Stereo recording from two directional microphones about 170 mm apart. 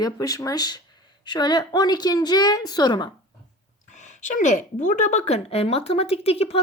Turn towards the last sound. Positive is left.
turn(degrees=35)  # may be behind; listen again after turning